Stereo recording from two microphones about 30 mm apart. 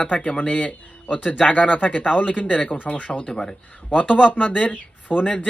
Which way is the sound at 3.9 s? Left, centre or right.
Left.